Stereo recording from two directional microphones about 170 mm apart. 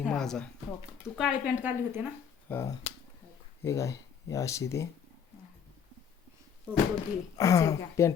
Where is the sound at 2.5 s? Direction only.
15° left (ahead or behind).